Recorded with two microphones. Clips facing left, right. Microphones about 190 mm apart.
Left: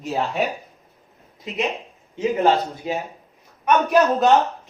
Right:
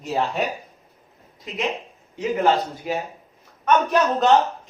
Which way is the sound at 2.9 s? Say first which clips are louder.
Even; 25° left (ahead or behind).